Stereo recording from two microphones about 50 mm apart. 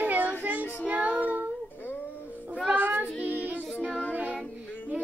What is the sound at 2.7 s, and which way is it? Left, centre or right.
Child singing, right.